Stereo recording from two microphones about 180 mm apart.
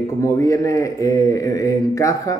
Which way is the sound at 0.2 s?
15° left (ahead or behind).